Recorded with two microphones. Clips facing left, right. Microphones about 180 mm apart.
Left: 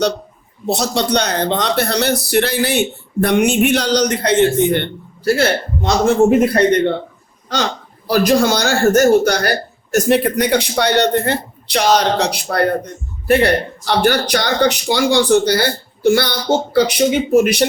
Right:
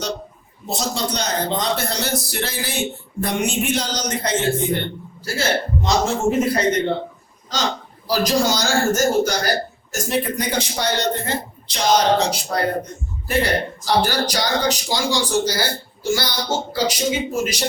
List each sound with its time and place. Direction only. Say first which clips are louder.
0.7 s speech: left 7 dB; 70° left (ahead or behind)
8.0 s speech: left 5 dB; 60° left (ahead or behind)